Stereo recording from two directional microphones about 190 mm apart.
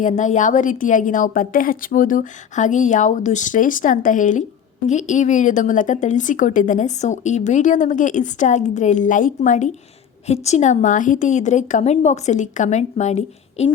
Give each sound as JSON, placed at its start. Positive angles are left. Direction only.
{"t": 0.0, "sound": "a woman's voice", "side_deg": 40}